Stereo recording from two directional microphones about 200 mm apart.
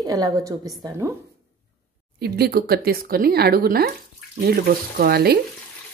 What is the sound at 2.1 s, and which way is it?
Speech, 50° right (ahead or behind).